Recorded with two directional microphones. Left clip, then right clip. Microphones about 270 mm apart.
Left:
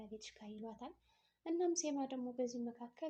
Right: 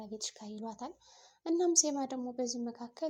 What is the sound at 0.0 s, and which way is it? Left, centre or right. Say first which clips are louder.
A woman's voice: right 10 dB; right.